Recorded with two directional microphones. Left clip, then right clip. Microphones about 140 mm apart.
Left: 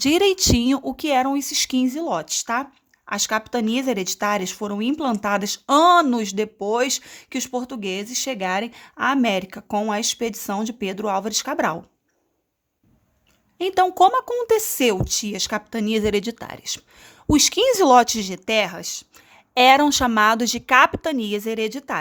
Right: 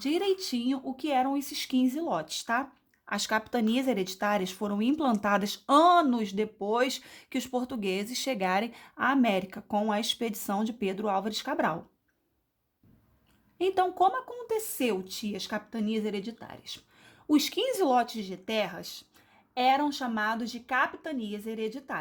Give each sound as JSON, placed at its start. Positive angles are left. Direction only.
{"t": 0.0, "sound": "a woman's voice", "side_deg": 50}
{"t": 13.6, "sound": "a woman's voice", "side_deg": 35}
{"t": 13.8, "sound": "speech", "side_deg": 50}